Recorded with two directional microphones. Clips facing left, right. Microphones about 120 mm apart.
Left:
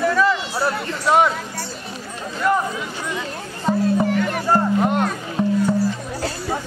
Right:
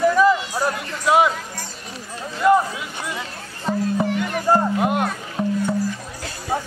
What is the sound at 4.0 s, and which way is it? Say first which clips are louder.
Music: left 2 dB; 15° right (ahead or behind).